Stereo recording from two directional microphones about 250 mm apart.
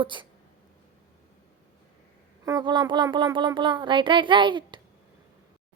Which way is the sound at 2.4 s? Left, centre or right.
Centre.